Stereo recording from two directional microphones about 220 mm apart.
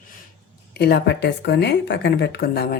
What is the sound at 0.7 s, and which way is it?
Speech, 50° left (ahead or behind).